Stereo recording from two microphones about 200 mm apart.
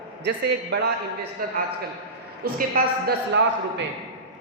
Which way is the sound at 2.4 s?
50° right (ahead or behind).